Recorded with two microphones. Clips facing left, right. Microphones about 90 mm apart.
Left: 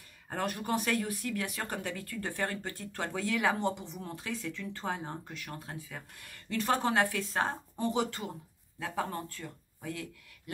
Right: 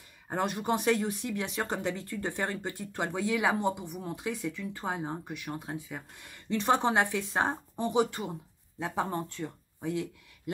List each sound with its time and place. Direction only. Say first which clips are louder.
0.3 s speech: right 3 dB; 20° right (ahead or behind)